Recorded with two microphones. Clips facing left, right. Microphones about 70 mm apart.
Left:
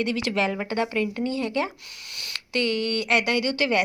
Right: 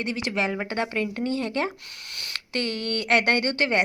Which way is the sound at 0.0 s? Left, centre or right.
Right.